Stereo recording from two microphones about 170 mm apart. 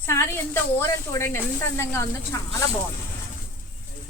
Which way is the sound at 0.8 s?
15° left (ahead or behind).